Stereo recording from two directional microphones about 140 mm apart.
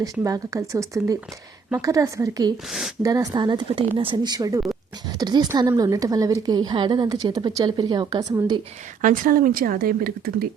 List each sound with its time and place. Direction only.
0.0 s a woman's voice: 25° right (ahead or behind)
2.6 s speech: centre (ahead or behind)
3.0 s a woman's voice: 25° right (ahead or behind)
9.0 s a woman's voice: 75° right (ahead or behind)